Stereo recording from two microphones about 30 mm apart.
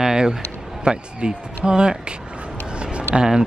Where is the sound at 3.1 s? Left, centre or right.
Right.